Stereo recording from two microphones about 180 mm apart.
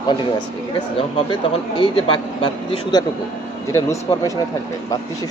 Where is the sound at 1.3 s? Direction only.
25° left (ahead or behind).